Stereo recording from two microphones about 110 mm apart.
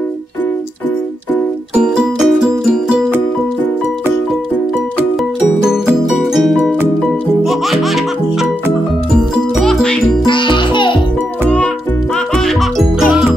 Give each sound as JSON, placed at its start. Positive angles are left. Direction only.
{"t": 1.8, "sound": "music", "side_deg": -5}
{"t": 5.7, "sound": "music", "side_deg": -5}
{"t": 10.2, "sound": "music", "side_deg": 45}
{"t": 12.4, "sound": "music", "side_deg": 0}